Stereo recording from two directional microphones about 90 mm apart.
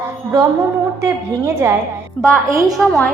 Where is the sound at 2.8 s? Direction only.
5° left (ahead or behind).